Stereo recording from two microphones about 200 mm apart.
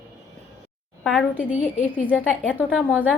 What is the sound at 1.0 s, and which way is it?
A woman's voice, centre (ahead or behind).